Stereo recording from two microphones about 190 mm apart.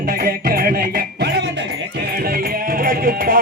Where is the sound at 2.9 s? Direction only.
50° right (ahead or behind).